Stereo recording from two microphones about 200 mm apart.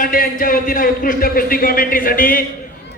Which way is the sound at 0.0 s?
45° left (ahead or behind).